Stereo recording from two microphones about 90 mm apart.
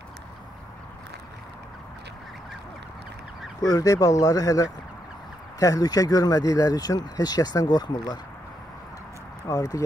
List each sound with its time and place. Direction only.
3.6 s speech: 40° left (ahead or behind)
9.4 s speech: 40° left (ahead or behind)